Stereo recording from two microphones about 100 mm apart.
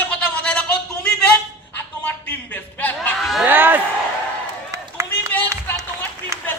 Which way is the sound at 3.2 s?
Centre (ahead or behind).